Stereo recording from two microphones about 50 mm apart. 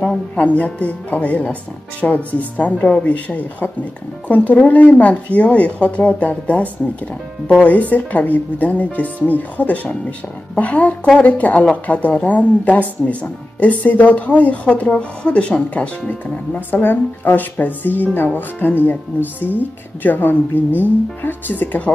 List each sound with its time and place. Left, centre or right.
0.4 s speech: left
16.1 s speech: left